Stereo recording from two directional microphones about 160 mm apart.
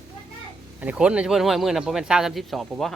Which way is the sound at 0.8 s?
5° right (ahead or behind).